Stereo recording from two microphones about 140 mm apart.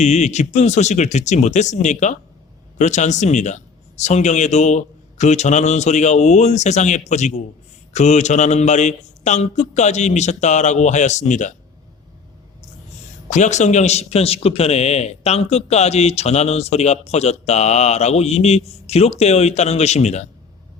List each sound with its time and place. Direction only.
0.0 s speech: 55° left (ahead or behind)
13.3 s a man's voice: 60° left (ahead or behind)